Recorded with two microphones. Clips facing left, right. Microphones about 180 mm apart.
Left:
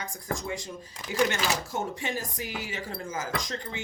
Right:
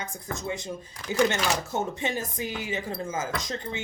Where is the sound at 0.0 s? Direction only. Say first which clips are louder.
Even; 20° right (ahead or behind).